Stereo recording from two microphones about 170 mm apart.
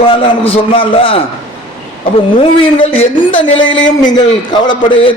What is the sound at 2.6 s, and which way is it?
A man's voice, 30° left (ahead or behind).